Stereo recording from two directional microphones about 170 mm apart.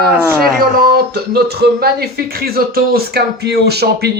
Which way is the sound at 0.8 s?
65° right (ahead or behind).